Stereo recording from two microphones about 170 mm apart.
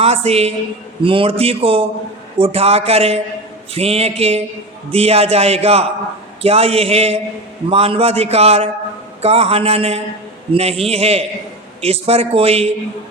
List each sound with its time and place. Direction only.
0.0 s a woman's voice: 35° right (ahead or behind)